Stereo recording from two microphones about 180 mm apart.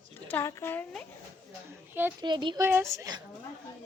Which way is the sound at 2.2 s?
25° right (ahead or behind).